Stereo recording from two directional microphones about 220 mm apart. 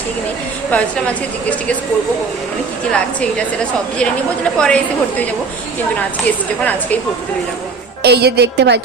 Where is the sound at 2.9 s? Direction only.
5° left (ahead or behind).